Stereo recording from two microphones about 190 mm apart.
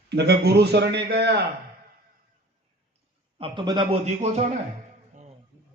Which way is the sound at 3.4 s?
25° right (ahead or behind).